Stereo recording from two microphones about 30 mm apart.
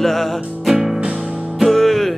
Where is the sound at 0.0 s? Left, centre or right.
Centre.